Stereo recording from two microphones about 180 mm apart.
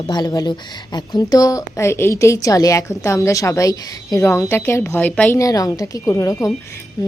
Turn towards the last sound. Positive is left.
turn(degrees=15)  # may be behind; listen again after turning